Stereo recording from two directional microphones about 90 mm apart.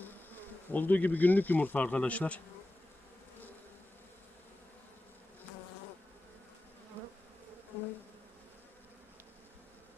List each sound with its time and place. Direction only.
0.0 s bee: 20° left (ahead or behind)